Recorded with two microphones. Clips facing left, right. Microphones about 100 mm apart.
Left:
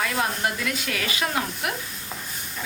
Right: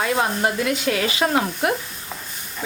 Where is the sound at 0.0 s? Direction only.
30° right (ahead or behind).